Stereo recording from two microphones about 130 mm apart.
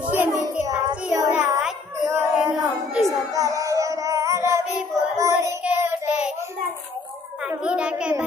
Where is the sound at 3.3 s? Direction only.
25° right (ahead or behind).